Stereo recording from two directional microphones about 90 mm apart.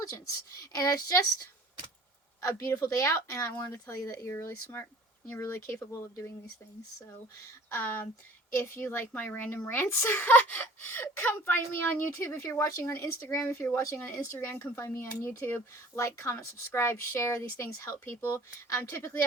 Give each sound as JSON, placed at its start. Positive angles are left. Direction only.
{"t": 0.6, "sound": "speech", "side_deg": 45}
{"t": 2.4, "sound": "a woman's voice", "side_deg": 35}
{"t": 7.7, "sound": "a woman's voice", "side_deg": 25}